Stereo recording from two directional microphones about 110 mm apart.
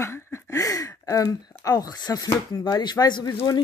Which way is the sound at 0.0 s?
25° left (ahead or behind).